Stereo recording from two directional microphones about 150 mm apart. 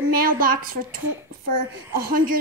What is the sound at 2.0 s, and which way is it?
Speech, 70° right (ahead or behind).